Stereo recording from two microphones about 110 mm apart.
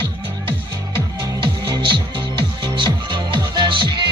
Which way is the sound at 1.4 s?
45° right (ahead or behind).